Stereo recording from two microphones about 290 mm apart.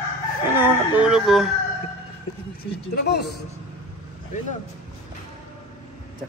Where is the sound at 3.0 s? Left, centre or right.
Left.